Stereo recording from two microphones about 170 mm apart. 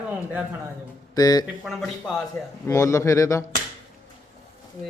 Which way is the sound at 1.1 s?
20° left (ahead or behind).